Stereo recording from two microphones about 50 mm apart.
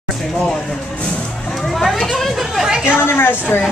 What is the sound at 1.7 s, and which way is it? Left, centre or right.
Children playing, centre.